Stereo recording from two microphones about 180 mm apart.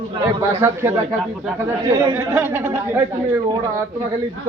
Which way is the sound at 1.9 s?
15° right (ahead or behind).